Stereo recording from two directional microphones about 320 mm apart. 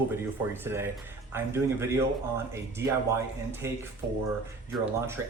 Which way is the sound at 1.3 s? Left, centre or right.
Centre.